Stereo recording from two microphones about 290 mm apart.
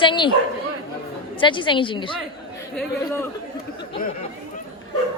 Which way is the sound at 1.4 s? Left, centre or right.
Centre.